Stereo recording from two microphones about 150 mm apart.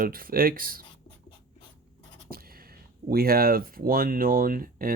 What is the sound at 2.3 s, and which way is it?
Speech, 80° right.